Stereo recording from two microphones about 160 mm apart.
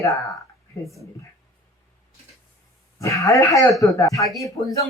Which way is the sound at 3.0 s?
20° left (ahead or behind).